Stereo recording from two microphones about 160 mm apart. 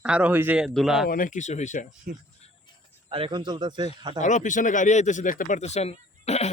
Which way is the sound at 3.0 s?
30° right (ahead or behind).